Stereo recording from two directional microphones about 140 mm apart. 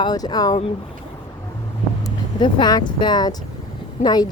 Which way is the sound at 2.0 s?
30° left (ahead or behind).